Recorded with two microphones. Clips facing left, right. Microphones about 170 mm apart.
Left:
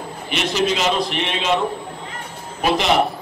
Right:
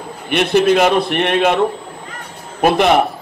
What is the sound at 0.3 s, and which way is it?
A man's voice, 55° right (ahead or behind).